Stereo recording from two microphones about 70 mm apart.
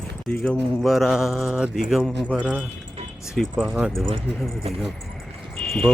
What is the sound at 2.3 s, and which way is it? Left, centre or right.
Speech, centre.